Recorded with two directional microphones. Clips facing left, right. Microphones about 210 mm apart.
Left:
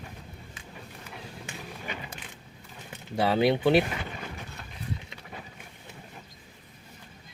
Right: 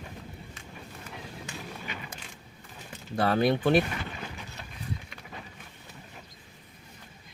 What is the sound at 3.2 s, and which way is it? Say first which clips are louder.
Speech: left 1 dB; 5° left (ahead or behind).